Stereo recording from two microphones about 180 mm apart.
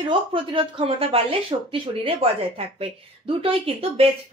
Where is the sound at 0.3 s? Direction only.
30° right (ahead or behind).